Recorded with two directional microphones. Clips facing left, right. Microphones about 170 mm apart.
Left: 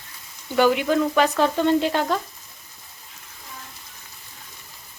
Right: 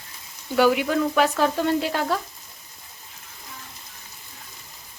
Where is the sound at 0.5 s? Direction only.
5° right (ahead or behind).